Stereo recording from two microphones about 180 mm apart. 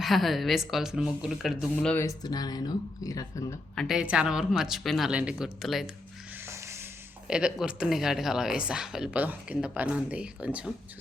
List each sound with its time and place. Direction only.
0.0 s speech: centre (ahead or behind)
2.0 s speech: 20° left (ahead or behind)
3.8 s speech: centre (ahead or behind)
6.4 s a sound: 15° right (ahead or behind)
7.3 s speech: 5° right (ahead or behind)